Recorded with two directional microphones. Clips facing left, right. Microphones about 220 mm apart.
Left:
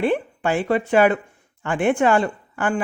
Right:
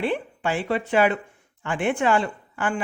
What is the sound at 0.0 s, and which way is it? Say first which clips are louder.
Speech: left 4 dB; 50° left (ahead or behind).